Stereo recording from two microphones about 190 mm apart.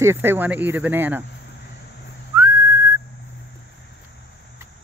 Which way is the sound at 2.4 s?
20° right (ahead or behind).